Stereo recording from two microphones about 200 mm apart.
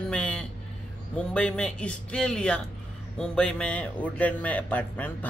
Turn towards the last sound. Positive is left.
turn(degrees=10)  # may be behind; listen again after turning